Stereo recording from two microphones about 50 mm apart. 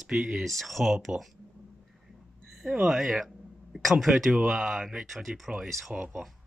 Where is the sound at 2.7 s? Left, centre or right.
Right.